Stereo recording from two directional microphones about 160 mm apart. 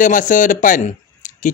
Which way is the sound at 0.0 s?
55° left (ahead or behind).